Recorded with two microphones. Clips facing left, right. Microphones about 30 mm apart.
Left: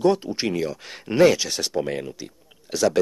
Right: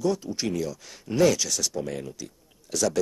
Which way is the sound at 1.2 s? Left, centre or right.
Left.